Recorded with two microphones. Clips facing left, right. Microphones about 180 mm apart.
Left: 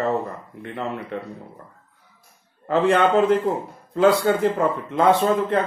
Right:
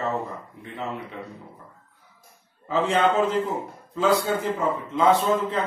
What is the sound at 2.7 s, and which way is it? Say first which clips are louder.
A man's voice: left 4 dB; 60° left (ahead or behind).